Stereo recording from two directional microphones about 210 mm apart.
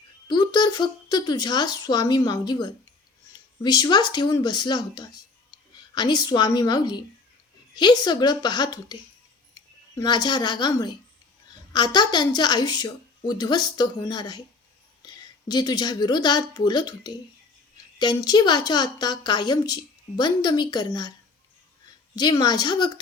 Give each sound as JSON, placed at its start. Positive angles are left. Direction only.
{"t": 0.3, "sound": "a woman's voice", "side_deg": 20}
{"t": 22.1, "sound": "a woman's voice", "side_deg": 20}